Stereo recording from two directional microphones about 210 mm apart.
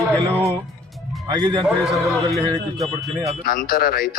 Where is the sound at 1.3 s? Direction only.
20° right (ahead or behind).